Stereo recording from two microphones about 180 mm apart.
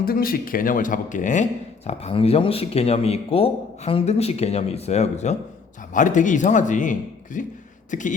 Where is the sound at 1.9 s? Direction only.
35° left (ahead or behind).